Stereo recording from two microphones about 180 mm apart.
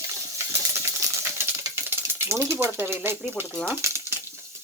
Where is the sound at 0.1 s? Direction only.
15° right (ahead or behind).